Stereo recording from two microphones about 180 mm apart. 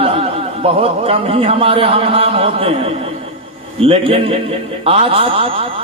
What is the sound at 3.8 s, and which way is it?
A man's voice, 30° right (ahead or behind).